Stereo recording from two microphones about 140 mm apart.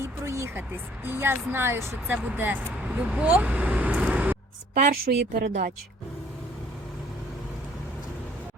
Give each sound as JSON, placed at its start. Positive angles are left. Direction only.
{"t": 0.0, "sound": "a sound", "side_deg": -20}
{"t": 1.0, "sound": "speech", "side_deg": -15}
{"t": 4.7, "sound": "a woman's voice", "side_deg": -90}